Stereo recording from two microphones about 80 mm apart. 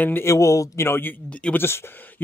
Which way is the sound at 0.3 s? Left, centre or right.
Left.